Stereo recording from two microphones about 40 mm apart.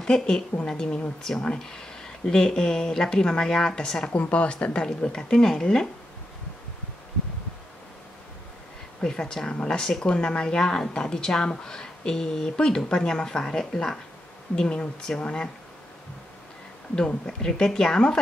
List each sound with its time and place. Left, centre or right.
0.0 s a woman's voice: centre
4.1 s speech: left; by 5.9 s centre
9.0 s speech: centre
9.5 s speech: left
9.8 s speech: centre
10.0 s speech: left
16.9 s speech: centre